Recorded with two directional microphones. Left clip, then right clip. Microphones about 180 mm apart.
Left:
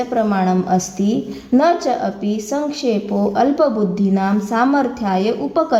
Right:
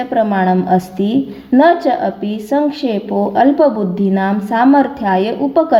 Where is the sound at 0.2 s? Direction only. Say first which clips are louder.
Right 5 dB; 20° right (ahead or behind).